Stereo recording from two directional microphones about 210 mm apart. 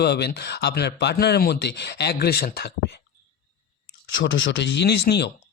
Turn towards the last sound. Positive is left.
turn(degrees=50)  # may be behind; listen again after turning